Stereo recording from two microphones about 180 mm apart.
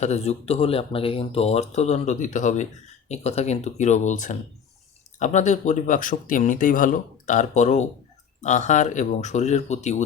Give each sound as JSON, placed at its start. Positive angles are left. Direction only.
{"t": 0.0, "sound": "speech", "side_deg": 35}